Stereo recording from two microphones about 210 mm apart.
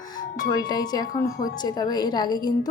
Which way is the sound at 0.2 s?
20° left (ahead or behind).